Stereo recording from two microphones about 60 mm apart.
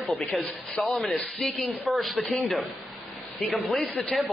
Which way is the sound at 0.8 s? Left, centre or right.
Centre.